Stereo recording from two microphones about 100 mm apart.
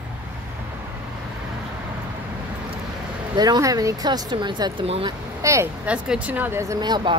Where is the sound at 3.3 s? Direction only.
40° right (ahead or behind).